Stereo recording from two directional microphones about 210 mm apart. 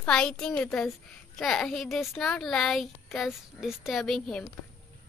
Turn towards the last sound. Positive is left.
turn(degrees=0)  # may be behind; listen again after turning